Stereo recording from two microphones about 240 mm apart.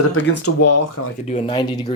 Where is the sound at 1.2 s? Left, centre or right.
Left.